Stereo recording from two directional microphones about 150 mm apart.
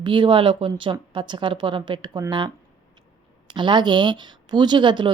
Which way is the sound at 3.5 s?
30° right (ahead or behind).